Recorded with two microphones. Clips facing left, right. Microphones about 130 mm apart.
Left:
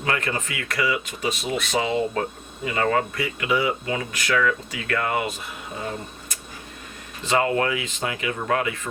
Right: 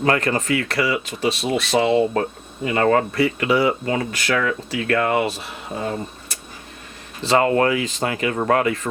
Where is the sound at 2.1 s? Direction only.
45° right (ahead or behind).